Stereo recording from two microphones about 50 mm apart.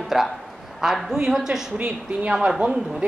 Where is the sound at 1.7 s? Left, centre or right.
Right.